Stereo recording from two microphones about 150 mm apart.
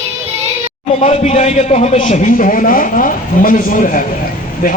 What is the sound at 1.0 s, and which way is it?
A man's voice, 50° left (ahead or behind).